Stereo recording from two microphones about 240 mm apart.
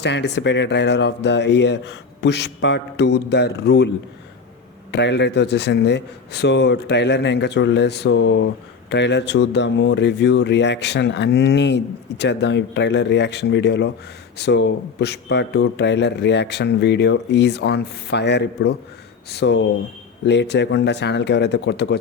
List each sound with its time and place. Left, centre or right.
0.0 s speech: left
4.9 s speech: left